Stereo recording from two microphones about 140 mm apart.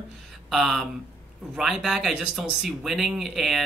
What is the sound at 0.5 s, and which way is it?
Speech, centre (ahead or behind).